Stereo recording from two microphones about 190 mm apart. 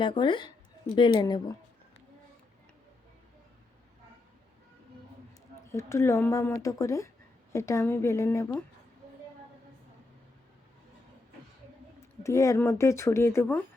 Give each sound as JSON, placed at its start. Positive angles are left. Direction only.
{"t": 0.0, "sound": "speech", "side_deg": 25}
{"t": 5.7, "sound": "speech", "side_deg": 15}
{"t": 12.2, "sound": "speech", "side_deg": 15}